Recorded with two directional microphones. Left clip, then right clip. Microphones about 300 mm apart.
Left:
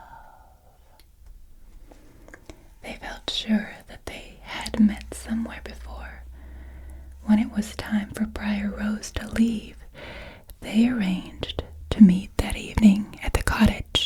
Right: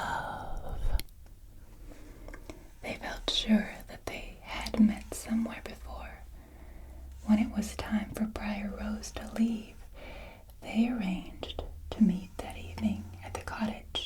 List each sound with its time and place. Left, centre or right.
2.2 s whispering: centre; by 6.1 s left
7.3 s whispering: left